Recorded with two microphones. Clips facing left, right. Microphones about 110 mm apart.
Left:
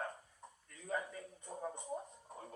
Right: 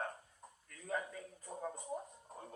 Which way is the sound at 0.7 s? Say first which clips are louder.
Even; centre (ahead or behind).